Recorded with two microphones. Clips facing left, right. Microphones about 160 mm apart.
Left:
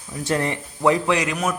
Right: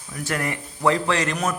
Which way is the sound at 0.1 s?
25° left (ahead or behind).